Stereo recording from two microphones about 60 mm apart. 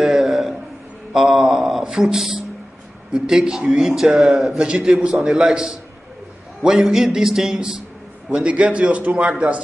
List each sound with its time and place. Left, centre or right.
0.0 s a sound: centre
1.1 s mantra: centre
3.1 s a man's voice: centre
8.3 s a man's voice: centre